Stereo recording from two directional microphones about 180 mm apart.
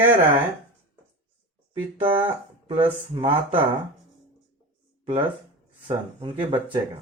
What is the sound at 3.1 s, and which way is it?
Speech, 30° right (ahead or behind).